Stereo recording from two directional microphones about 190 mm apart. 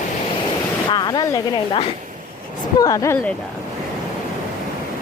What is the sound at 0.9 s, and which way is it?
Speech, 25° left (ahead or behind).